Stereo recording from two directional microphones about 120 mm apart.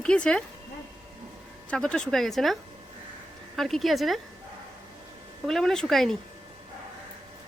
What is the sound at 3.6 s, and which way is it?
Speech, centre (ahead or behind).